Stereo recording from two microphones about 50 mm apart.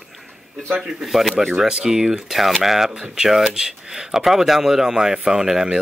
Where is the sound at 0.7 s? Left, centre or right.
Centre.